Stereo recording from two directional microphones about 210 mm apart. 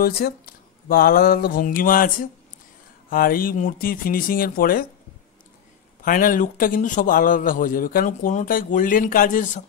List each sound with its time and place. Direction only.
0.0 s speech: 45° left (ahead or behind)
6.0 s a man's voice: 40° left (ahead or behind)